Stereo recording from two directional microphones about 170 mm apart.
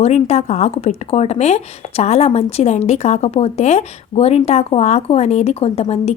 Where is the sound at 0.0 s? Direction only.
40° left (ahead or behind).